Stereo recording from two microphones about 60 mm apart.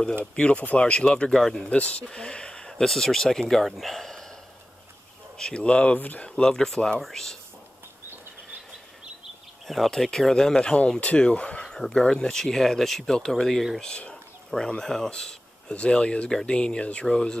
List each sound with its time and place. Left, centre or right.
0.2 s speech: centre
1.7 s speech: centre
5.4 s speech: centre
9.7 s speech: centre; by 11.6 s left
11.6 s speech: centre